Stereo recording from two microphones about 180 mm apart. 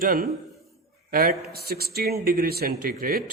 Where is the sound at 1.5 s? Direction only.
60° right (ahead or behind).